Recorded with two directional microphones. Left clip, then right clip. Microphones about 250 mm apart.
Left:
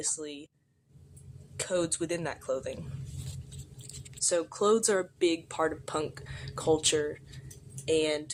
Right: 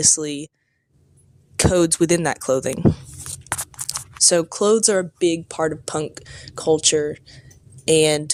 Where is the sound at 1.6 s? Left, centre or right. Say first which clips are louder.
Right 13 dB; right.